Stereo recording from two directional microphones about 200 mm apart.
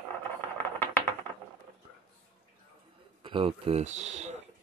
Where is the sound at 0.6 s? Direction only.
10° left (ahead or behind).